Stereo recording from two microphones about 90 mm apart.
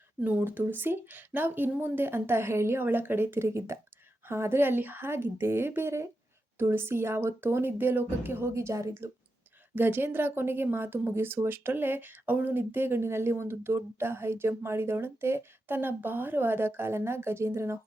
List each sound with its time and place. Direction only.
0.2 s speech: 20° right (ahead or behind)